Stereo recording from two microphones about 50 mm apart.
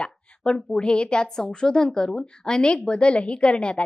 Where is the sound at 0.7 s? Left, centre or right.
Centre.